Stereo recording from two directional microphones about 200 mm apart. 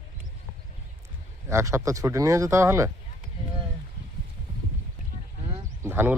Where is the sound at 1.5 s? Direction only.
15° right (ahead or behind).